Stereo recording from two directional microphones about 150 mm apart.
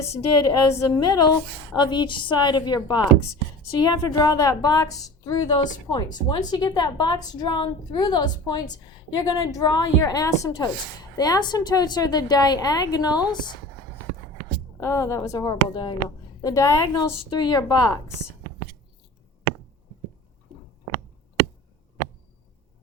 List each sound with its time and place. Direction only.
0.4 s a woman's voice: 20° left (ahead or behind)
14.8 s a woman's voice: 20° left (ahead or behind)